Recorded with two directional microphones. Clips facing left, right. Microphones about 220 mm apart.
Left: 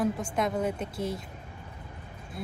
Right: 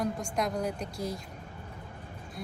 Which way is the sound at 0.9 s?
25° left (ahead or behind).